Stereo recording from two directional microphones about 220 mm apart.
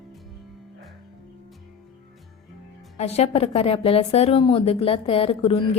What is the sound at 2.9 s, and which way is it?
A woman's voice, 30° left (ahead or behind).